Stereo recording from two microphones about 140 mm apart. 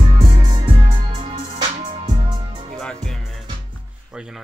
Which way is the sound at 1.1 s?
45° right (ahead or behind).